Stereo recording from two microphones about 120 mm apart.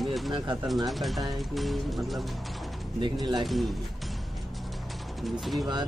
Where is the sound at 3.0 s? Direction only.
40° right (ahead or behind).